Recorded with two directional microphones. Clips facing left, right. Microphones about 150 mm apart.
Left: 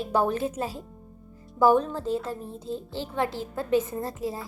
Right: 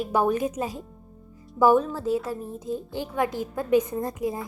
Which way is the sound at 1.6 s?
10° right (ahead or behind).